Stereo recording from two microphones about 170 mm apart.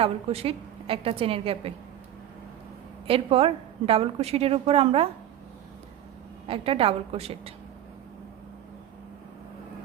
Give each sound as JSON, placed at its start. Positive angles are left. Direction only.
{"t": 0.0, "sound": "a woman's voice", "side_deg": -35}
{"t": 3.1, "sound": "a woman's voice", "side_deg": -35}
{"t": 6.5, "sound": "a woman's voice", "side_deg": -35}